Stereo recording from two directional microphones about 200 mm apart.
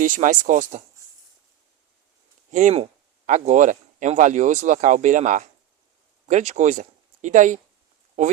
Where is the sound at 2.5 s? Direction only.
35° right (ahead or behind).